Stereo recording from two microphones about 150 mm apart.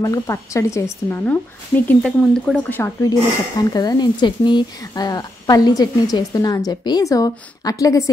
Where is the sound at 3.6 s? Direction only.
25° left (ahead or behind).